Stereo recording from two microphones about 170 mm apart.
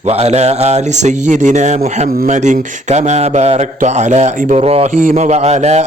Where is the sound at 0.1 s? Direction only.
40° right (ahead or behind).